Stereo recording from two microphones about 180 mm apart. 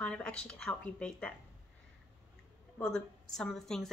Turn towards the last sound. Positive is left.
turn(degrees=0)  # may be behind; listen again after turning